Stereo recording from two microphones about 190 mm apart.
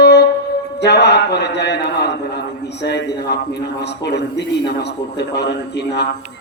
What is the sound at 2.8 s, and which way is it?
A man's voice, 60° left (ahead or behind).